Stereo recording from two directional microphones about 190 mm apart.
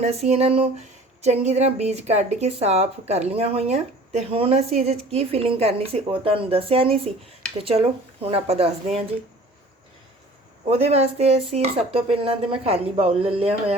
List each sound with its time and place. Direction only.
0.0 s speech: 35° right (ahead or behind)
10.7 s speech: 35° right (ahead or behind)